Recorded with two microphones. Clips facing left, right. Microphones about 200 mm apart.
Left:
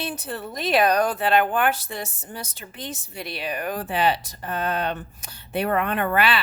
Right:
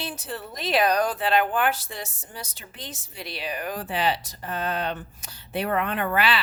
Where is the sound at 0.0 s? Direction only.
55° left (ahead or behind).